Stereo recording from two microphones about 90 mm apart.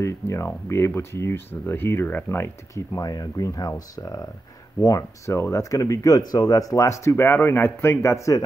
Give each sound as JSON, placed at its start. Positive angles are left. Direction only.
{"t": 0.0, "sound": "speech", "side_deg": 30}
{"t": 2.9, "sound": "speech", "side_deg": 40}